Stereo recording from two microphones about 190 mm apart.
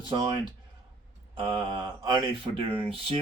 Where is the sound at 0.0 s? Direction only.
25° right (ahead or behind).